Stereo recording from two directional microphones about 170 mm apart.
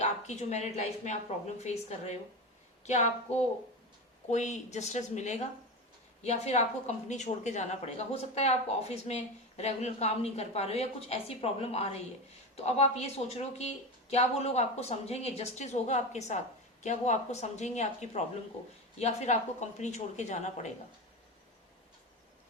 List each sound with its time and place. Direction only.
0.0 s speech: 40° left (ahead or behind)
4.3 s a woman's voice: 45° left (ahead or behind)